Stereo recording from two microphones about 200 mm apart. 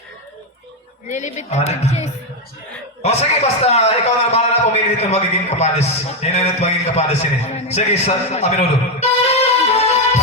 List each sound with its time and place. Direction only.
1.0 s a woman's voice: 40° left (ahead or behind)